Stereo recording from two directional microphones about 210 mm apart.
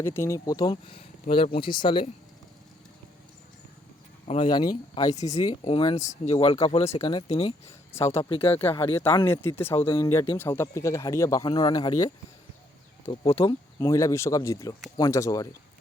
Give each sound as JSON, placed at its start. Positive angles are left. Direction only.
{"t": 0.0, "sound": "speech", "side_deg": 10}
{"t": 4.3, "sound": "speech", "side_deg": 25}
{"t": 5.4, "sound": "speech", "side_deg": 25}
{"t": 8.4, "sound": "speech", "side_deg": 10}
{"t": 9.8, "sound": "speech", "side_deg": 25}
{"t": 10.3, "sound": "speech", "side_deg": 10}